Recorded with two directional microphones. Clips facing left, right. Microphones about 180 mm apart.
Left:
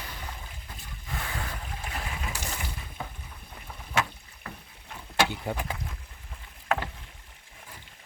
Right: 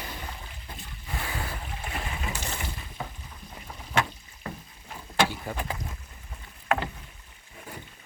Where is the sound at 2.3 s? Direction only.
10° left (ahead or behind).